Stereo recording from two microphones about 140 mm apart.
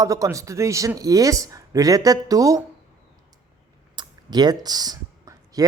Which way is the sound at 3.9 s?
30° right (ahead or behind).